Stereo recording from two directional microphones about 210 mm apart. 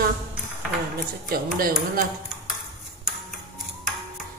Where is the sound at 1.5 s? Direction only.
40° right (ahead or behind).